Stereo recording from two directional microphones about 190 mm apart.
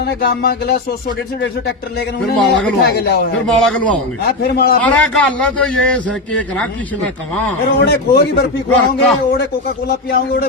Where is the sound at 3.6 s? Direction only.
5° left (ahead or behind).